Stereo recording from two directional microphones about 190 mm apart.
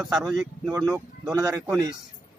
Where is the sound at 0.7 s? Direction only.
15° right (ahead or behind).